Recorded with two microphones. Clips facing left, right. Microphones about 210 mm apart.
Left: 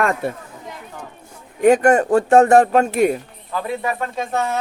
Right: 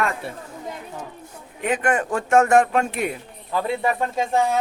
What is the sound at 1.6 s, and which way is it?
Speech, 45° left (ahead or behind).